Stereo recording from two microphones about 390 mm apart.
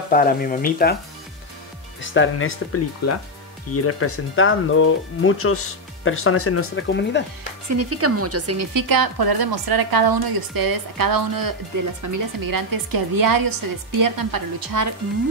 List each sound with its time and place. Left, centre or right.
0.1 s speech: left
2.0 s speech: left
7.6 s speech: right
8.7 s a woman's voice: right